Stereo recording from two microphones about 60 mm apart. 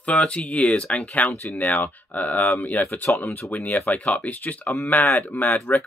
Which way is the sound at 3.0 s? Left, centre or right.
Left.